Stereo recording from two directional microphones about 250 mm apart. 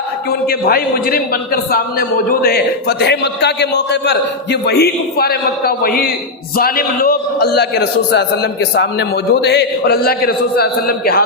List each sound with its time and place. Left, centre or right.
0.3 s a man's voice: left